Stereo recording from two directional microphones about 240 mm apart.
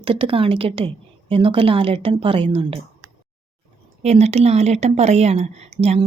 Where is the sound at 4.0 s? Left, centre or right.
Right.